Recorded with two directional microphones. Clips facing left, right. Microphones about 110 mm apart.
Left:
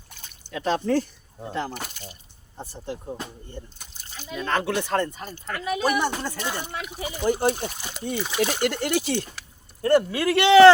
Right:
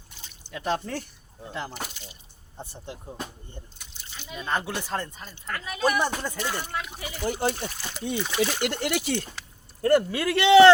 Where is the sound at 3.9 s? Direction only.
40° left (ahead or behind).